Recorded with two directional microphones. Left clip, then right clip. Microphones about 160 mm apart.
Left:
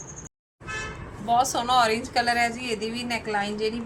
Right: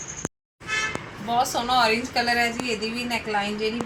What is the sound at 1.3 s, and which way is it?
A woman's voice, 20° left (ahead or behind).